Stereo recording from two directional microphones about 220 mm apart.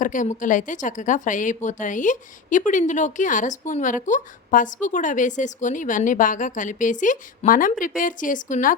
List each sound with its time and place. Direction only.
0.0 s a woman's voice: 35° left (ahead or behind)